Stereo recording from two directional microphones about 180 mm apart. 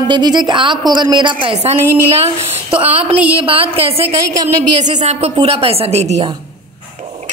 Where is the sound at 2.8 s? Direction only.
10° right (ahead or behind).